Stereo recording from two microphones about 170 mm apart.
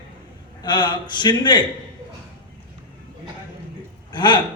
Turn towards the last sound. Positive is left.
turn(degrees=25)  # may be behind; listen again after turning